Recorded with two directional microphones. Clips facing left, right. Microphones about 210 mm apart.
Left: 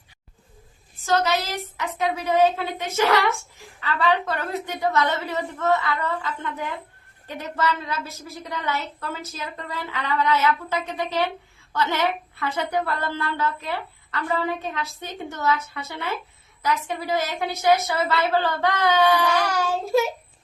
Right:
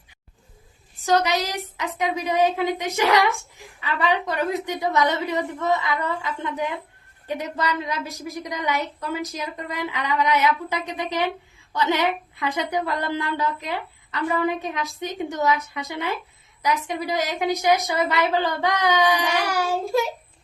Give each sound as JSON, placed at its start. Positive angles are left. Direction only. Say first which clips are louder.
{"t": 0.9, "sound": "a woman's voice", "louder": "right 1 dB", "side_deg": -15}
{"t": 19.8, "sound": "child singing", "louder": "left 4 dB", "side_deg": 0}